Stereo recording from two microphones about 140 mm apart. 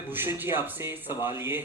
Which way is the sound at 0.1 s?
15° right (ahead or behind).